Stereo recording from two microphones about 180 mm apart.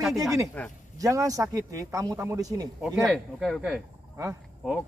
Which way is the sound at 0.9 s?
20° right (ahead or behind).